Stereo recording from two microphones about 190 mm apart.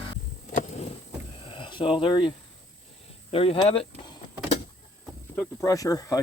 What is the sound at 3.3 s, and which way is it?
Speech, 30° left (ahead or behind).